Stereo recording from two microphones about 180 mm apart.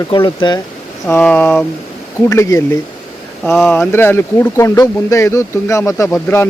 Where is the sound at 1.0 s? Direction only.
5° left (ahead or behind).